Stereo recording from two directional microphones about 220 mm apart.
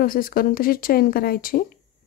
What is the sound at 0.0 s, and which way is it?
Speech, 40° left (ahead or behind).